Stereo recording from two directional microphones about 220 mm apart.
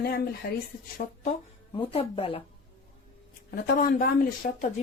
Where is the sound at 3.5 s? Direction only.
40° left (ahead or behind).